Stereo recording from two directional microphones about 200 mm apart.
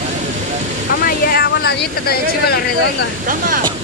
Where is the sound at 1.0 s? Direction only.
50° left (ahead or behind).